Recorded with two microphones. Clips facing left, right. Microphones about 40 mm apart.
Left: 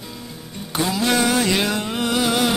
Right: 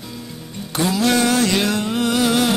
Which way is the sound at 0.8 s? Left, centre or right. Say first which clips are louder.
Right 2 dB; centre.